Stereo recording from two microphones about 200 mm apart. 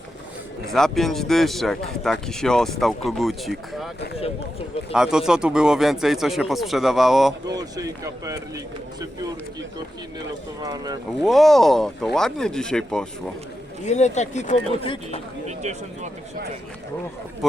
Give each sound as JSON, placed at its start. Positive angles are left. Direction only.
{"t": 0.7, "sound": "speech", "side_deg": 0}
{"t": 4.9, "sound": "speech", "side_deg": -5}
{"t": 7.4, "sound": "speech", "side_deg": -20}
{"t": 11.2, "sound": "speech", "side_deg": 0}
{"t": 13.8, "sound": "speech", "side_deg": 35}